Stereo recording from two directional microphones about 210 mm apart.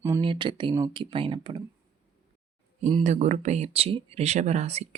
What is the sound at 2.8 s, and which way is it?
Speech, 30° right (ahead or behind).